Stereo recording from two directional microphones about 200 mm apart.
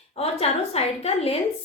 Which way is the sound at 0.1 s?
30° left (ahead or behind).